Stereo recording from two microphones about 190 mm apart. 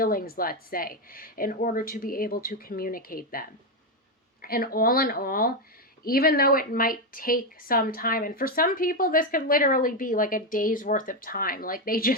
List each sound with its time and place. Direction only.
0.0 s speech: 50° left (ahead or behind)
4.4 s speech: 50° left (ahead or behind)